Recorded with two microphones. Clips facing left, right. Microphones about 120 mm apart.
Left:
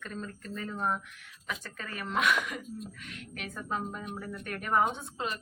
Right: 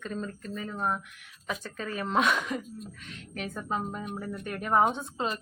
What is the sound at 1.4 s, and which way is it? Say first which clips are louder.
Speech: right 5 dB; 25° right (ahead or behind).